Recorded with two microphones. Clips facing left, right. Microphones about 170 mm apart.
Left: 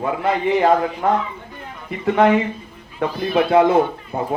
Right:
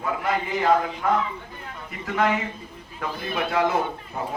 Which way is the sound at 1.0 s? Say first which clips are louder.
Left 4 dB; 30° left (ahead or behind).